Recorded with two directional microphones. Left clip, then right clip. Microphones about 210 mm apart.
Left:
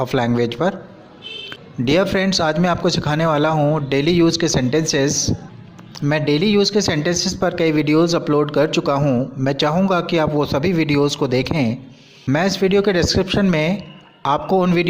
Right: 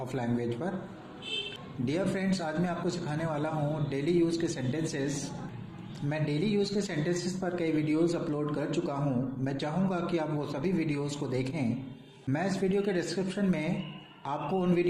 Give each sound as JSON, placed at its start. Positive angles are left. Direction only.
{"t": 0.1, "sound": "a man's voice", "side_deg": 45}
{"t": 1.8, "sound": "a man's voice", "side_deg": 45}